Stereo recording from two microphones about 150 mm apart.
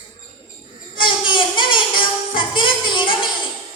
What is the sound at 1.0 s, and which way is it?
Music, 35° left (ahead or behind).